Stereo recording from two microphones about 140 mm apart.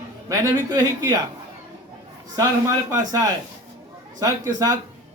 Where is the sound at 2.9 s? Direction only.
25° right (ahead or behind).